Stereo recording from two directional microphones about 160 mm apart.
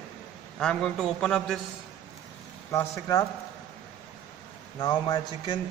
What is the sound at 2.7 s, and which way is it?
Speech, 20° left (ahead or behind).